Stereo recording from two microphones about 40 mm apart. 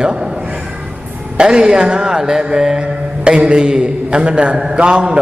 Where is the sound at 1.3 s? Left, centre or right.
Centre.